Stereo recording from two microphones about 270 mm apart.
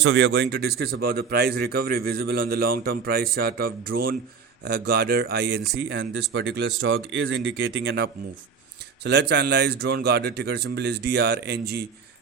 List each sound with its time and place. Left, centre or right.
0.0 s speech: right